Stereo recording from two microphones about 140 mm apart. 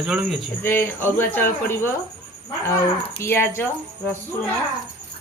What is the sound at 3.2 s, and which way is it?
Speech, 15° left (ahead or behind).